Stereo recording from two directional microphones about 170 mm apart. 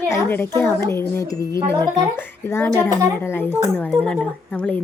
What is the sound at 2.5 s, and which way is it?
A woman's voice, 15° left (ahead or behind).